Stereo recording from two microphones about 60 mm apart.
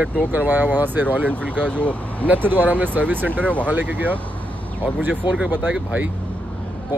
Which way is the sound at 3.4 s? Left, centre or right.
Left.